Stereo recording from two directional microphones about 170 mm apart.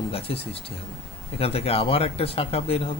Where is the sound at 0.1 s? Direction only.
35° left (ahead or behind).